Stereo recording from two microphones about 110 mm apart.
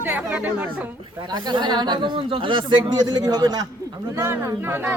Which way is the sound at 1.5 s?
45° right (ahead or behind).